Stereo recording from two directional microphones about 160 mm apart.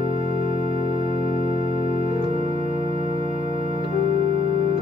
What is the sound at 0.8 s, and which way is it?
Music, 50° left (ahead or behind).